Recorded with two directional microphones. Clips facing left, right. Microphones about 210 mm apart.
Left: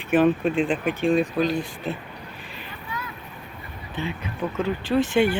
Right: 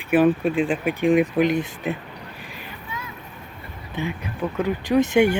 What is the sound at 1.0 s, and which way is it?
Speech, 15° right (ahead or behind).